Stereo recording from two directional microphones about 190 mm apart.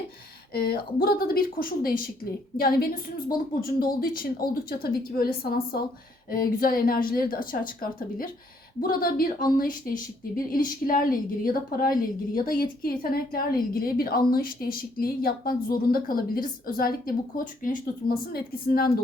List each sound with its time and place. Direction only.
0.5 s a woman's voice: 55° left (ahead or behind)